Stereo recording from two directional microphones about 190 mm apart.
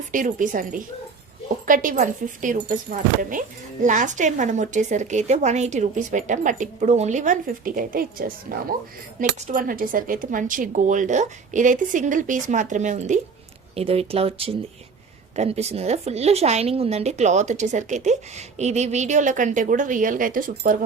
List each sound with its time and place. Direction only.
0.1 s speech: 45° right (ahead or behind)